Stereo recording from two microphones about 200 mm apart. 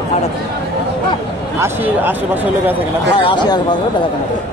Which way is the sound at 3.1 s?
20° left (ahead or behind).